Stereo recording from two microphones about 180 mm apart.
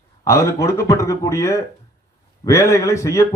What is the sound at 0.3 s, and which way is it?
A man's voice, 15° left (ahead or behind).